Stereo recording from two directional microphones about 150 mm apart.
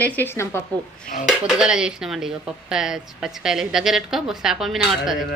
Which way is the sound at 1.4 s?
5° right (ahead or behind).